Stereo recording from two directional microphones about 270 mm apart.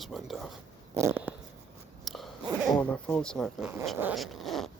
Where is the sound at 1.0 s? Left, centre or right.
Centre.